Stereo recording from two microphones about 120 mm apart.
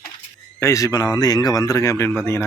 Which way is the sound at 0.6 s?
25° left (ahead or behind).